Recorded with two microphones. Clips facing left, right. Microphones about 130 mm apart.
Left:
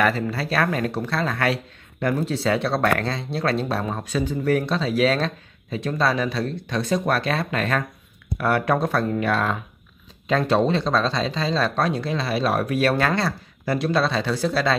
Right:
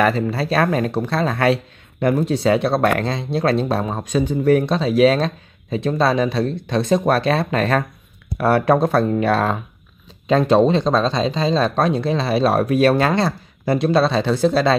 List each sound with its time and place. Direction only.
0.0 s speech: 25° right (ahead or behind)